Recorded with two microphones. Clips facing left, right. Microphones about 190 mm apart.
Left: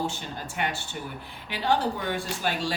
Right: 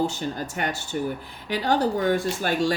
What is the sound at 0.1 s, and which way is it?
Speech, 45° right (ahead or behind).